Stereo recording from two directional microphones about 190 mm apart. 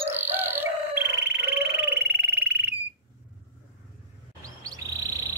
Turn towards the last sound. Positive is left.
turn(degrees=-20)  # may be behind; listen again after turning